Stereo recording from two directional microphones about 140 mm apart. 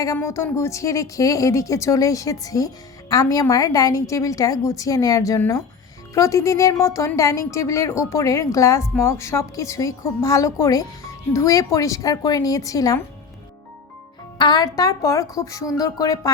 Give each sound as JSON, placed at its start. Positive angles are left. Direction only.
{"t": 0.0, "sound": "a woman's voice", "side_deg": 20}
{"t": 14.3, "sound": "a woman's voice", "side_deg": 30}